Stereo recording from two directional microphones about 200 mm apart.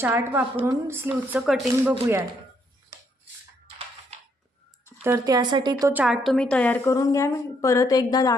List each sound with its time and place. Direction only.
0.0 s speech: 10° right (ahead or behind)
5.0 s speech: 15° right (ahead or behind)
5.9 s a woman's voice: 5° right (ahead or behind); by 8.4 s 20° left (ahead or behind)